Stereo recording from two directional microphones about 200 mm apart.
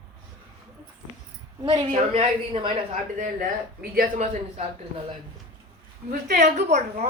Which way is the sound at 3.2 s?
45° right (ahead or behind).